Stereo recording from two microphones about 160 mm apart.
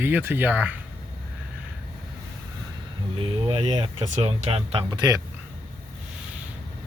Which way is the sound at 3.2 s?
35° right (ahead or behind).